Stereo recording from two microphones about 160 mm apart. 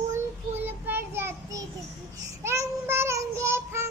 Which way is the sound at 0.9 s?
15° right (ahead or behind).